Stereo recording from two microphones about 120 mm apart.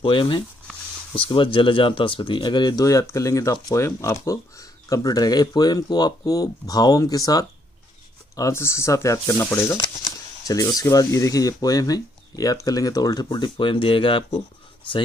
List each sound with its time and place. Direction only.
0.0 s speech: 45° left (ahead or behind); by 9.8 s 20° left (ahead or behind)
9.8 s speech: 30° left (ahead or behind)